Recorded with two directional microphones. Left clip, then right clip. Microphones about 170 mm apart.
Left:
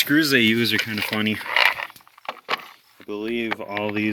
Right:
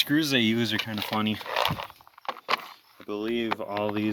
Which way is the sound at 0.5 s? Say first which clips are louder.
Left 7 dB; 5° right (ahead or behind).